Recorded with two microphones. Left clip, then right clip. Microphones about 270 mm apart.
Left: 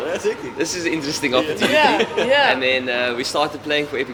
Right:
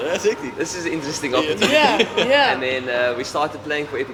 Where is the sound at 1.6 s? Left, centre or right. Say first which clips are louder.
Right 2 dB; right.